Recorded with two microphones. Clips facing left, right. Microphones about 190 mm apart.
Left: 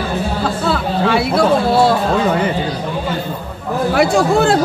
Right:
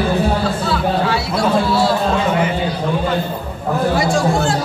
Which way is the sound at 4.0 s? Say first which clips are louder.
Left 4 dB; 60° left (ahead or behind).